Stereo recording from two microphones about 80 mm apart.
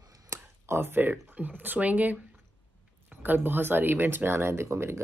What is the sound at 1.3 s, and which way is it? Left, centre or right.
Speech, right.